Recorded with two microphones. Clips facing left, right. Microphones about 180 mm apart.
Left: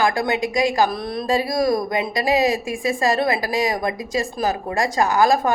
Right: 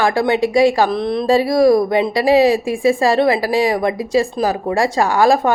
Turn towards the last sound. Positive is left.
turn(degrees=-30)  # may be behind; listen again after turning